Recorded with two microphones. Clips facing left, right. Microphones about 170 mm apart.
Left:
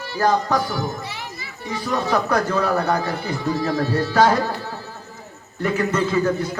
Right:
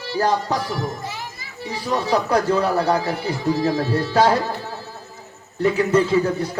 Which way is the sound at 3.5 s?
30° right (ahead or behind).